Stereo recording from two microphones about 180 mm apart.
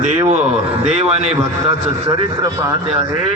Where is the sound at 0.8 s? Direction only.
35° right (ahead or behind).